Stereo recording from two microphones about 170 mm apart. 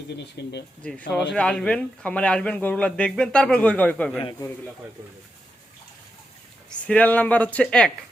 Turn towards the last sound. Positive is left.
turn(degrees=5)  # may be behind; listen again after turning